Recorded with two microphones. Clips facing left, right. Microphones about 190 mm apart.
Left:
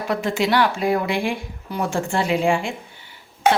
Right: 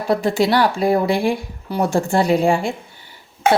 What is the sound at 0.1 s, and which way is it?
Speech, 35° right (ahead or behind).